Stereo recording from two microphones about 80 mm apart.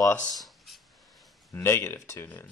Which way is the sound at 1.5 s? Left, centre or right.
Left.